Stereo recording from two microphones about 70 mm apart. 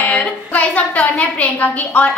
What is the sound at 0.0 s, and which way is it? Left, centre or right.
A woman's voice, centre.